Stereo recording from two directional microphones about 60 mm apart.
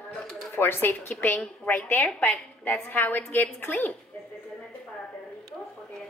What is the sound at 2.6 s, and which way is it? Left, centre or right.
Speech, left.